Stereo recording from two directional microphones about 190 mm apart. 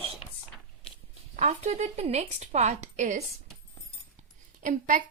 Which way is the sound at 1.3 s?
40° right (ahead or behind).